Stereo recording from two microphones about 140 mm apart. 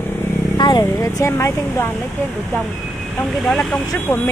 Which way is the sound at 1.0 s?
20° left (ahead or behind).